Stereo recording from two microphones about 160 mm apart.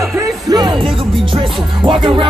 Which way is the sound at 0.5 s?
25° right (ahead or behind).